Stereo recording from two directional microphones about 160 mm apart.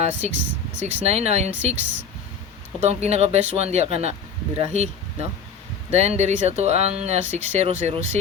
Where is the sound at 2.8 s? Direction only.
45° right (ahead or behind).